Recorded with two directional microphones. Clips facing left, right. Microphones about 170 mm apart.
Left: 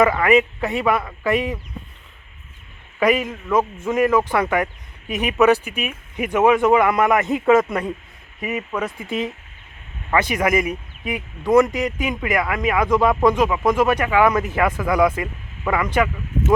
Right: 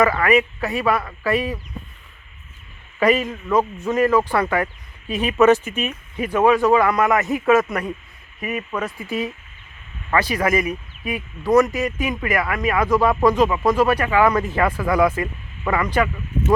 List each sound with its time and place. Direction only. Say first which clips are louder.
0.0 s speech: left 1 dB; 20° left (ahead or behind)
3.0 s speech: even; 15° left (ahead or behind)